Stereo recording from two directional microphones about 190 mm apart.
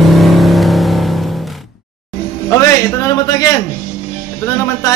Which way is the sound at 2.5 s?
15° left (ahead or behind).